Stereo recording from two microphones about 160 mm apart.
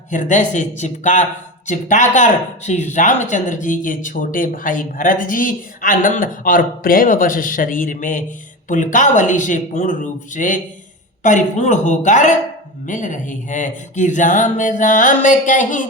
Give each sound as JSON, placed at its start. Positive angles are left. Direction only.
{"t": 0.1, "sound": "speech", "side_deg": 50}